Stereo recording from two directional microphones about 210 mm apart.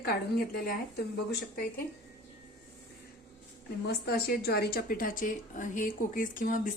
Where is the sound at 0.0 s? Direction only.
45° left (ahead or behind).